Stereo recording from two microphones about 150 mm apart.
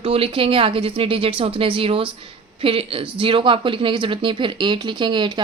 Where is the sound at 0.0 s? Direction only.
40° right (ahead or behind).